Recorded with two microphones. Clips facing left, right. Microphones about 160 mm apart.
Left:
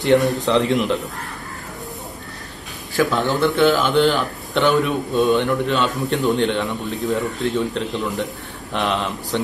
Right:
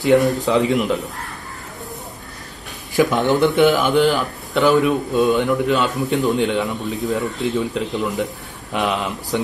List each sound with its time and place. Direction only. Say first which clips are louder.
0.0 s speech: right 1 dB; centre (ahead or behind)
3.0 s a man's voice: right 3 dB; 15° right (ahead or behind)
4.1 s speech: right 1 dB; centre (ahead or behind)